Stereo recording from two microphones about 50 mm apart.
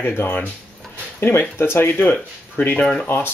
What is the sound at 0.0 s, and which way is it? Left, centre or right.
Speech, left.